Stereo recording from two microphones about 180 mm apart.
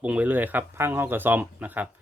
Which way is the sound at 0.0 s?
10° right (ahead or behind).